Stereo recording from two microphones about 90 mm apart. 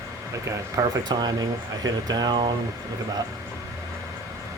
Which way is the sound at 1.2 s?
45° right (ahead or behind).